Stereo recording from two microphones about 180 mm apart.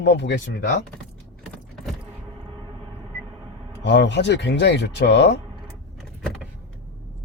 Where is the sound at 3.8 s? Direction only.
80° left.